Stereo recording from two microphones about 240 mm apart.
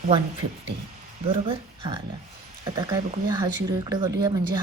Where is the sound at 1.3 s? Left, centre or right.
Right.